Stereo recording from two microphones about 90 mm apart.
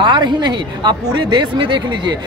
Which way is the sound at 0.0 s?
55° right (ahead or behind).